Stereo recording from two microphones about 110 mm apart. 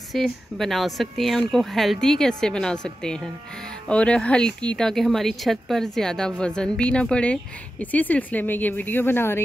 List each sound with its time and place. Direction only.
0.1 s speech: centre (ahead or behind); by 9.4 s 20° left (ahead or behind)